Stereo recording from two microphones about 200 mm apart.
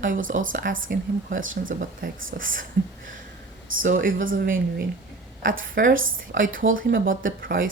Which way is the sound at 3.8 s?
40° right (ahead or behind).